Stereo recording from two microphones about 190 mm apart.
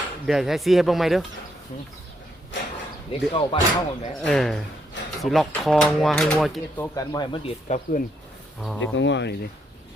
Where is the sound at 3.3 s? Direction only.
25° left (ahead or behind).